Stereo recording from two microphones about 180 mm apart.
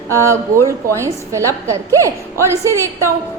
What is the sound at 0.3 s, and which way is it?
A woman's voice, 15° right (ahead or behind).